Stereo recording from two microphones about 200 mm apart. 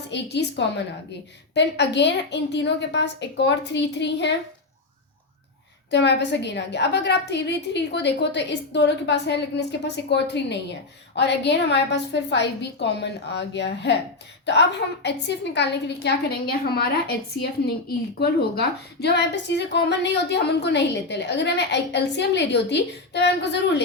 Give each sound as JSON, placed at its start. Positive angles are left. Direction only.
{"t": 0.1, "sound": "a woman's voice", "side_deg": 60}
{"t": 5.9, "sound": "a woman's voice", "side_deg": 60}